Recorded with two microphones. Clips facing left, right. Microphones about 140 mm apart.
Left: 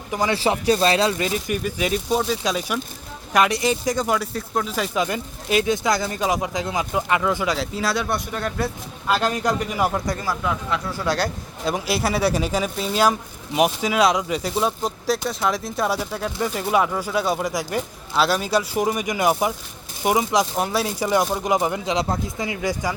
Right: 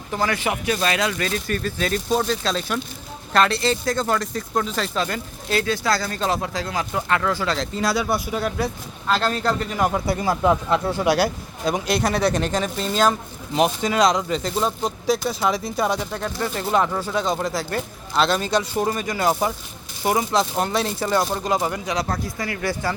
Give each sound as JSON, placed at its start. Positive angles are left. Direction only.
{"t": 0.1, "sound": "speech", "side_deg": 15}
{"t": 0.3, "sound": "speech", "side_deg": 30}
{"t": 1.2, "sound": "speech", "side_deg": 15}
{"t": 9.0, "sound": "speech", "side_deg": 10}
{"t": 10.4, "sound": "speech", "side_deg": -35}
{"t": 10.9, "sound": "speech", "side_deg": -15}
{"t": 11.6, "sound": "speech", "side_deg": 0}